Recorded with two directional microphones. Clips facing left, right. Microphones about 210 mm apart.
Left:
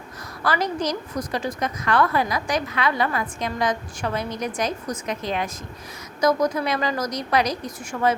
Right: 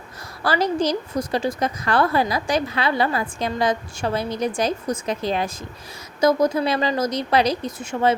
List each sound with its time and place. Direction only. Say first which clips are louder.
0.4 s a woman's voice: right 3 dB; 30° right (ahead or behind)